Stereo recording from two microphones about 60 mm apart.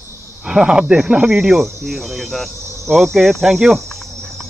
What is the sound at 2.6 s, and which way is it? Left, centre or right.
Cricket, right.